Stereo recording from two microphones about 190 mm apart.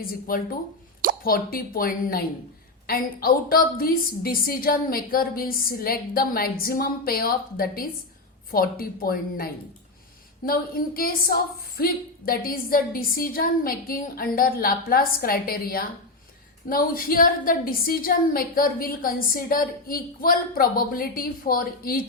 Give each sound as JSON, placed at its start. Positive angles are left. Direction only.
{"t": 0.0, "sound": "a woman's voice", "side_deg": 50}